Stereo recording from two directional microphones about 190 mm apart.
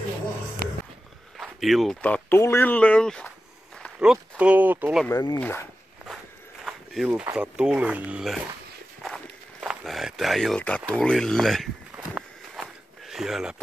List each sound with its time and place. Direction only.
1.4 s speech: centre (ahead or behind)
5.0 s speech: 20° left (ahead or behind)
6.6 s a sound: centre (ahead or behind)
7.3 s speech: 5° right (ahead or behind)
9.0 s walk: centre (ahead or behind)